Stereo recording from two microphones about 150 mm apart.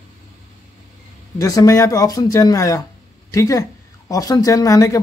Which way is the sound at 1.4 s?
20° left (ahead or behind).